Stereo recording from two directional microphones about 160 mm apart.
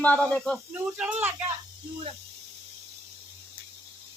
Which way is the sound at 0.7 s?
10° right (ahead or behind).